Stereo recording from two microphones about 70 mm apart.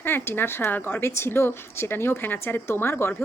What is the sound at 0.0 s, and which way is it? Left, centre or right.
Speech, left.